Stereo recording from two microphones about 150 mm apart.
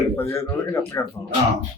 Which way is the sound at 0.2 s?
15° left (ahead or behind).